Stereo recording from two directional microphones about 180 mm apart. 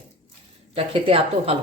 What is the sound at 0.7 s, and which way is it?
Speech, 30° right (ahead or behind).